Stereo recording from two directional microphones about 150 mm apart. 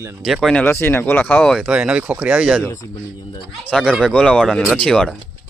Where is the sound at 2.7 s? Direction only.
25° left (ahead or behind).